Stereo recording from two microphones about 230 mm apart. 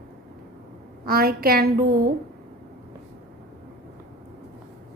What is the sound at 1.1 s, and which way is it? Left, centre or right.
A woman's voice, right.